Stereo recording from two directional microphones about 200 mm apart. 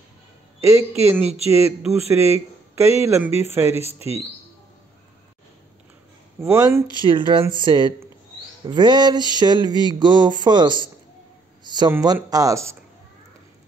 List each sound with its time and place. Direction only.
0.6 s speech: 15° right (ahead or behind)
6.4 s speech: 10° right (ahead or behind)